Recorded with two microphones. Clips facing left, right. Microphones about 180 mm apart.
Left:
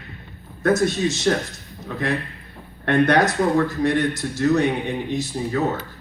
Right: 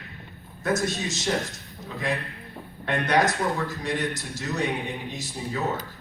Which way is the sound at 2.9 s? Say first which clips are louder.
Left 6 dB; 60° left (ahead or behind).